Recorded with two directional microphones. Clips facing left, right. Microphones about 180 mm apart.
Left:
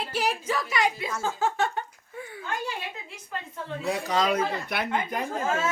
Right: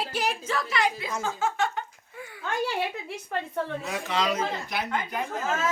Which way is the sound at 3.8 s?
40° left (ahead or behind).